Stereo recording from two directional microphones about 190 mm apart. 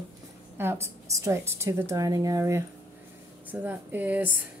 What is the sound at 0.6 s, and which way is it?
Speech, 15° right (ahead or behind).